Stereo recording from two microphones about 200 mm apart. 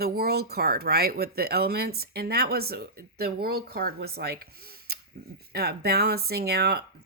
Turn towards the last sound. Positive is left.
turn(degrees=-50)  # may be behind; listen again after turning